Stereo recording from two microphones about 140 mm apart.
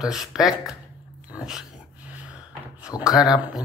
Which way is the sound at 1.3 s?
5° right (ahead or behind).